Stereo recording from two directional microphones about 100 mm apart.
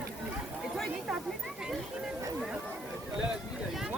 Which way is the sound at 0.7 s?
Centre (ahead or behind).